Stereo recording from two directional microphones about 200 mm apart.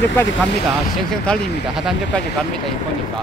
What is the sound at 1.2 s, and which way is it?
Speech, centre (ahead or behind).